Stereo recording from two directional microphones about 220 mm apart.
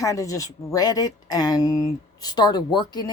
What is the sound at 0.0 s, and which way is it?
A woman's voice, 15° left (ahead or behind).